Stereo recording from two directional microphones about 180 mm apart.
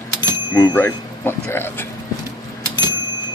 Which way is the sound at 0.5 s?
10° left (ahead or behind).